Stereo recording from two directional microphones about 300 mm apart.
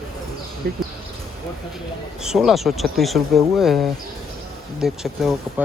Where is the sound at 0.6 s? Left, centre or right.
Right.